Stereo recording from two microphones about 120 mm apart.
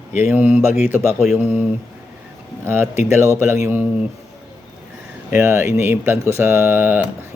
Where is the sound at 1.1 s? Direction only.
Centre (ahead or behind).